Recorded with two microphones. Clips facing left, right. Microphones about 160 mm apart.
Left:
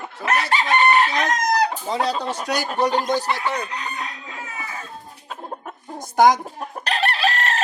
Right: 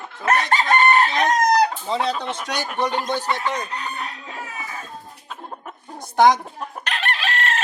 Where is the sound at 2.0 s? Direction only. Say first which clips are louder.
Left 1 dB; 35° left (ahead or behind).